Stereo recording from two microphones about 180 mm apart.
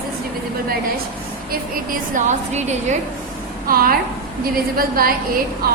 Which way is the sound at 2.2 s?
40° right (ahead or behind).